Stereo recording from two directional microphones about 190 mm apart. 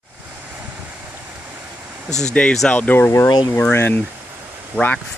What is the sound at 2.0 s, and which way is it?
Speech, 35° left (ahead or behind).